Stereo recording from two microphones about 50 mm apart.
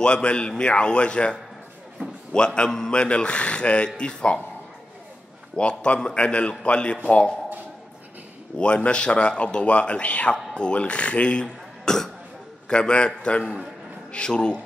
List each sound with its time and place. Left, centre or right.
0.0 s speech: left
5.6 s speech: left
8.5 s speech: centre
11.4 s throat clearing: centre
12.6 s speech: centre